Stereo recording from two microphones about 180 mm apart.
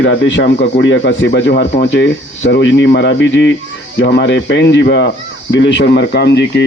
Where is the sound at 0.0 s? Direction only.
90° left.